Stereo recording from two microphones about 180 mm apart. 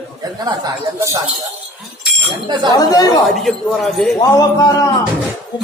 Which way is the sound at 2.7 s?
20° left (ahead or behind).